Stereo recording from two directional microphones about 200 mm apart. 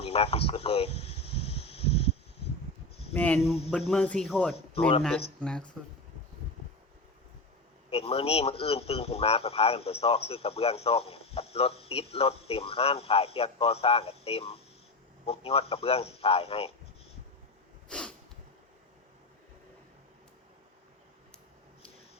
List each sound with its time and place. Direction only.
0.0 s a sound: 30° left (ahead or behind)
3.2 s speech: 10° left (ahead or behind)
4.5 s speech: 30° left (ahead or behind)
5.4 s speech: 5° left (ahead or behind)
7.9 s a man's voice: 30° left (ahead or behind)
17.8 s sneeze: 5° left (ahead or behind)